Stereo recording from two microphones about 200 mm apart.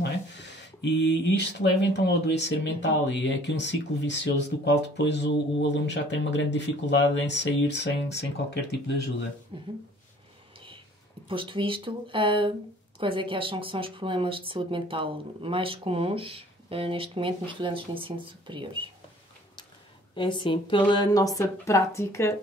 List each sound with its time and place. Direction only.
0.0 s speech: 60° left (ahead or behind)
9.5 s speech: 30° right (ahead or behind)
11.2 s speech: 25° right (ahead or behind)
20.2 s a woman's voice: 25° left (ahead or behind)